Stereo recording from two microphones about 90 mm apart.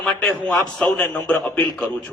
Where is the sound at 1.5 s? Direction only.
15° left (ahead or behind).